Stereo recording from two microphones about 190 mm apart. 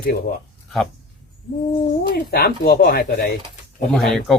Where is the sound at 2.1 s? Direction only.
55° left (ahead or behind).